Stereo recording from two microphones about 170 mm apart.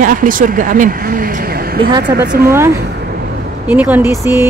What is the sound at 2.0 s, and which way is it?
Speech, 75° right (ahead or behind).